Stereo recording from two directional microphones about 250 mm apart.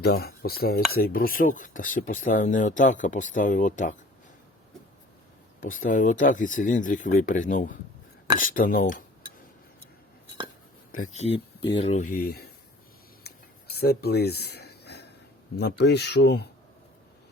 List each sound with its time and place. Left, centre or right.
0.0 s speech: left
5.5 s speech: left
11.1 s speech: left
13.2 s a sound: left
15.5 s speech: left